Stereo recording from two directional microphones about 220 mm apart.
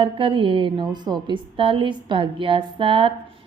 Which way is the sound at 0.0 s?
25° right (ahead or behind).